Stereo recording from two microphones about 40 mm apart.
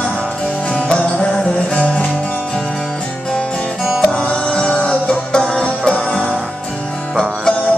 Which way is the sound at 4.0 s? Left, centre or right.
Left.